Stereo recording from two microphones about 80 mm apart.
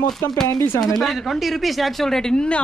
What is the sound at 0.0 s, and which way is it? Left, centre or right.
Speech, left.